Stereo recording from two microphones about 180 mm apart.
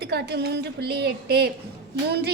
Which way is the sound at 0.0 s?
65° right (ahead or behind).